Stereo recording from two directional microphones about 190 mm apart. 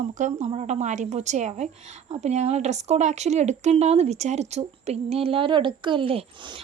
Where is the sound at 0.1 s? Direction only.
40° right (ahead or behind).